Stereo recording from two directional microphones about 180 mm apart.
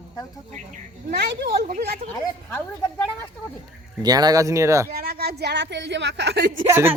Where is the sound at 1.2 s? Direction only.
65° right (ahead or behind).